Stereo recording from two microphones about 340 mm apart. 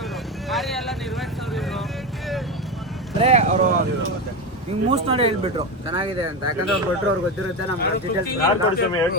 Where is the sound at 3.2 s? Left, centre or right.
Centre.